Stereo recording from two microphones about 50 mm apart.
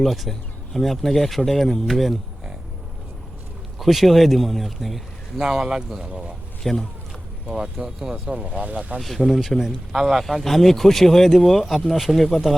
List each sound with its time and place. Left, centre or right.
0.0 s speech: centre
3.8 s speech: centre
6.0 s speech: centre
6.6 s speech: centre
7.4 s speech: centre
7.9 s speech: centre; by 9.0 s right
9.0 s speech: centre